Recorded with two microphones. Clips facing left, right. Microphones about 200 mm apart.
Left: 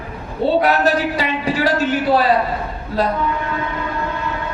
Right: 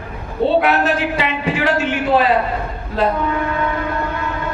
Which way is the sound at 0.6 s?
40° left (ahead or behind).